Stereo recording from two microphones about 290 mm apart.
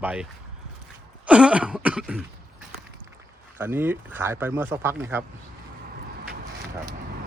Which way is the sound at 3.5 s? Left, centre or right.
Centre.